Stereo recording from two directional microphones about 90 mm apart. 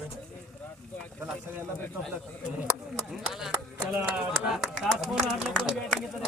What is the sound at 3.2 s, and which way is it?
Speech, 5° right (ahead or behind).